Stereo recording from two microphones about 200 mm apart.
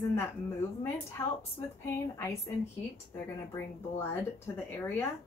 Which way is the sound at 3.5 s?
10° left (ahead or behind).